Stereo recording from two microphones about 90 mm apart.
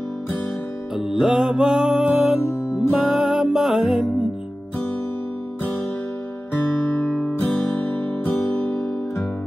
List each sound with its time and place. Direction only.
0.9 s music: 5° right (ahead or behind)
8.5 s music: 25° left (ahead or behind)